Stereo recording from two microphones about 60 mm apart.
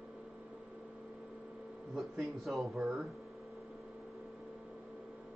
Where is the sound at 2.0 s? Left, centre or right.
Centre.